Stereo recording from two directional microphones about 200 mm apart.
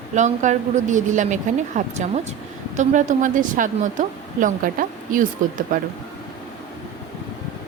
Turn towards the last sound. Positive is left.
turn(degrees=-45)  # may be behind; listen again after turning